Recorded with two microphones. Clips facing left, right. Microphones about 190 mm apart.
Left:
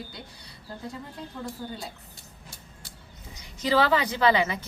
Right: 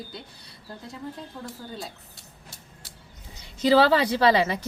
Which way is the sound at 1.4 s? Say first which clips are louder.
Left 2 dB; 5° right (ahead or behind).